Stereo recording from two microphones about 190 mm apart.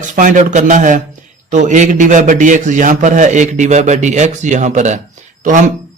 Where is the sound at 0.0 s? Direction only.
40° right (ahead or behind).